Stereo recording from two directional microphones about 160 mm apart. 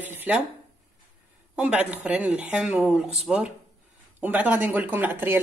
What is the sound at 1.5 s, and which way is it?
Speech, 5° right (ahead or behind).